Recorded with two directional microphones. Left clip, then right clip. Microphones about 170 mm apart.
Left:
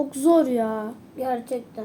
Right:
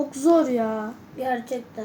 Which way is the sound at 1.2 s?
5° right (ahead or behind).